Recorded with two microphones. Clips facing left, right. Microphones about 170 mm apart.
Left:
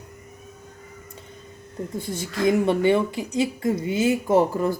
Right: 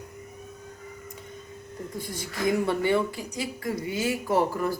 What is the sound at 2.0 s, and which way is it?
Speech, 25° left (ahead or behind).